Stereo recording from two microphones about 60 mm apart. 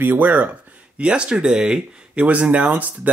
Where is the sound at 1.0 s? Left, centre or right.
Centre.